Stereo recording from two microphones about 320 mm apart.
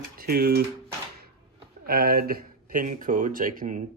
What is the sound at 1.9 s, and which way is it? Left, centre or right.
Speech, right.